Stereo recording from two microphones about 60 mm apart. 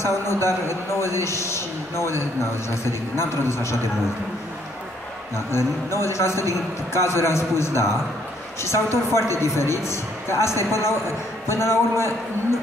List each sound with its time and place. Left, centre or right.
0.0 s a man's voice: left
5.5 s a man's voice: left